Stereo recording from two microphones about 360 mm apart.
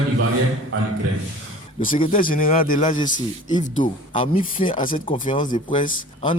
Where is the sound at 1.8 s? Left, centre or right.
Left.